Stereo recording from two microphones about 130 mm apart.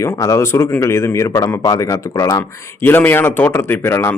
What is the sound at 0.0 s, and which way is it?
Speech, 25° left (ahead or behind).